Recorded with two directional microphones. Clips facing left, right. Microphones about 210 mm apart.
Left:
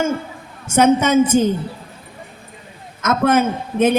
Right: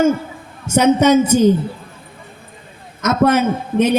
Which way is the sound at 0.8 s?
50° left (ahead or behind).